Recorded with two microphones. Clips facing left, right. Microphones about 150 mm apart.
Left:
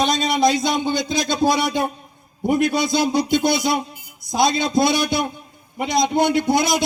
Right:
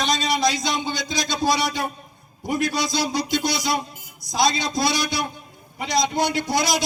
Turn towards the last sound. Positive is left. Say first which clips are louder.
# left 4 dB
turn(degrees=55)  # may be behind; listen again after turning